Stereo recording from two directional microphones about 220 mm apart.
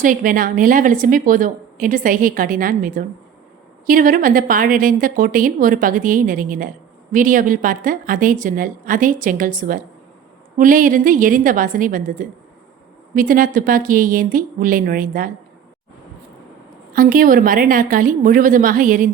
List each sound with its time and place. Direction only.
0.0 s a woman's voice: 40° right (ahead or behind)
16.9 s a woman's voice: 40° right (ahead or behind)